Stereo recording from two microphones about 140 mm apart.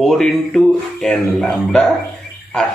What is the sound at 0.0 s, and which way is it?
Speech, centre (ahead or behind).